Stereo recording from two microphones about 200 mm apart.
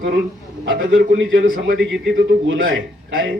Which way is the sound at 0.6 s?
70° right (ahead or behind).